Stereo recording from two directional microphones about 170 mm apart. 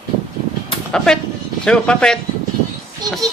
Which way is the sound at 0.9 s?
5° left (ahead or behind).